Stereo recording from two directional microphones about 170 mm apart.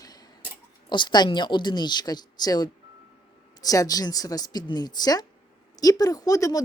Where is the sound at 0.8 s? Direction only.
25° left (ahead or behind).